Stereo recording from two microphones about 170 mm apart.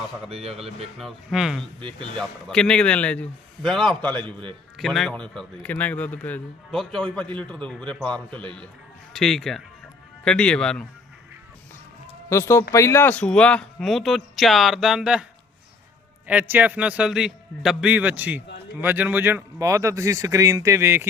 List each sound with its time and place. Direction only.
0.3 s a man's voice: 35° right (ahead or behind)
0.9 s a man's voice: centre (ahead or behind)
12.3 s a man's voice: 15° left (ahead or behind); by 21.1 s 15° right (ahead or behind)